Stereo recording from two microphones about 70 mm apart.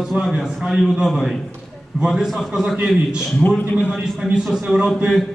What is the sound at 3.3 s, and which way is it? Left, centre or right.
Speech, left.